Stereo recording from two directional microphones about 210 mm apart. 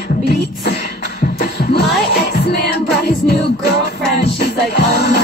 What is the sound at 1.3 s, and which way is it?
Music, 50° left (ahead or behind).